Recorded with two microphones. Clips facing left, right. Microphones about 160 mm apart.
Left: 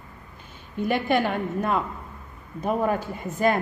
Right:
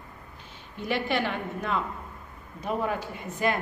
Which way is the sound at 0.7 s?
50° left (ahead or behind).